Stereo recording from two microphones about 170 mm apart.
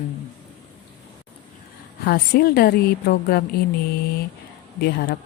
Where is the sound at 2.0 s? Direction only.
60° left (ahead or behind).